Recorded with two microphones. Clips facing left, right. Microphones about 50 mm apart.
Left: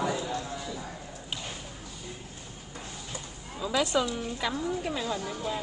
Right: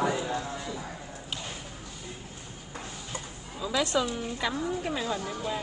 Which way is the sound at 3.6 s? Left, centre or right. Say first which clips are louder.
Left 1 dB; centre.